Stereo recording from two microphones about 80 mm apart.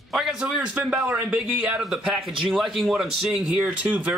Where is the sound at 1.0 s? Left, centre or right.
Centre.